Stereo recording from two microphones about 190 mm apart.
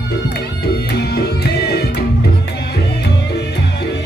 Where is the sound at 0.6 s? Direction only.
55° left (ahead or behind).